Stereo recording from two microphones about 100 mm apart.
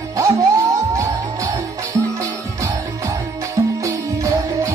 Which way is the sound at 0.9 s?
35° right (ahead or behind).